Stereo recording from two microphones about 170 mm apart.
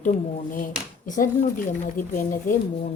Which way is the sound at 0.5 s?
50° left (ahead or behind).